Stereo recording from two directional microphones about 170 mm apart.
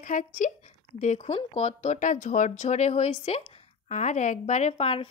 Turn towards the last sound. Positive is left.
turn(degrees=35)  # may be behind; listen again after turning